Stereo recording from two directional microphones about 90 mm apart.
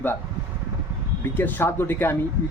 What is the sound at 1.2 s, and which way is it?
Speech, 20° left (ahead or behind).